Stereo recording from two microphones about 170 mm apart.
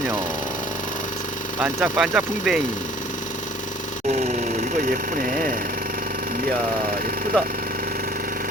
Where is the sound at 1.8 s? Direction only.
5° right (ahead or behind).